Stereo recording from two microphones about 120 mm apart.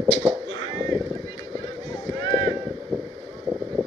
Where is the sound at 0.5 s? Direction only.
45° left (ahead or behind).